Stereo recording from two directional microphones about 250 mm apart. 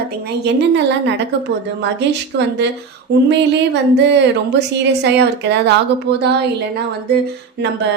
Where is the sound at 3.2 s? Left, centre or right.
Right.